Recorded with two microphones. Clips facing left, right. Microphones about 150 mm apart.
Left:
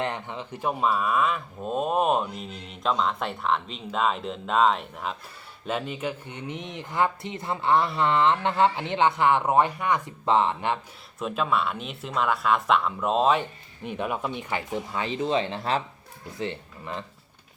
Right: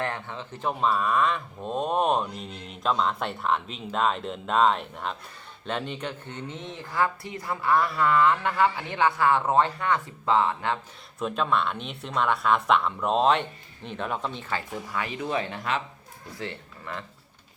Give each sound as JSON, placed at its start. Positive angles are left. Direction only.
{"t": 0.0, "sound": "speech", "side_deg": 20}
{"t": 11.2, "sound": "speech", "side_deg": 5}
{"t": 16.4, "sound": "speech", "side_deg": 20}